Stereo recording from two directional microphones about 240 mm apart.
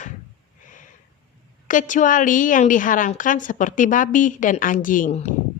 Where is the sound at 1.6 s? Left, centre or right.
Left.